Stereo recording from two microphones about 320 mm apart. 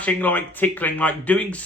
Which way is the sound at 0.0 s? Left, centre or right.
Centre.